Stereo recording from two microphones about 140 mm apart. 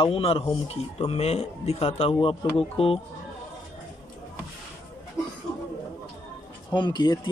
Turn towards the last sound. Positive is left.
turn(degrees=30)  # may be behind; listen again after turning